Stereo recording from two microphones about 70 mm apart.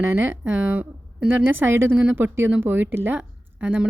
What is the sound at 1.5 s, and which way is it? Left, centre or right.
A woman's voice, right.